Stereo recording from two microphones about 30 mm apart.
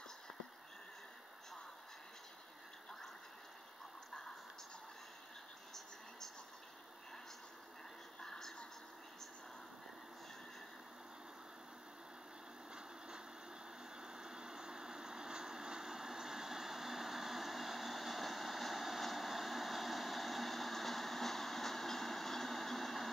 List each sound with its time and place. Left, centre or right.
8.2 s music: centre
14.0 s vehicle: right; by 23.0 s centre